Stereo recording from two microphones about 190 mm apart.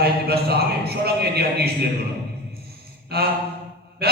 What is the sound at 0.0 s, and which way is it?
A man's voice, 55° right (ahead or behind).